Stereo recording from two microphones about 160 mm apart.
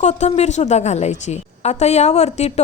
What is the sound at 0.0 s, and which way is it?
A woman's voice, 45° left (ahead or behind).